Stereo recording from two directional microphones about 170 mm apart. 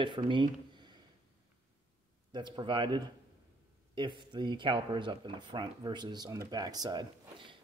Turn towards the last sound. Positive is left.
turn(degrees=-25)  # may be behind; listen again after turning